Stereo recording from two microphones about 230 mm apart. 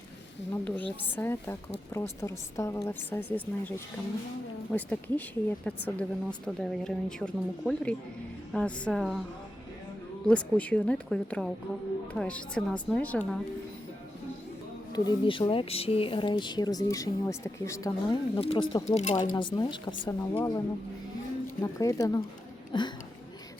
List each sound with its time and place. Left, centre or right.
0.5 s speech: centre
10.2 s speech: centre
14.9 s speech: centre
18.3 s speech: left
21.6 s speech: centre